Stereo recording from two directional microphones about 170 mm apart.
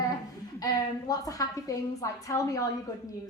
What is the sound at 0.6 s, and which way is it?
A woman's voice, 20° left (ahead or behind).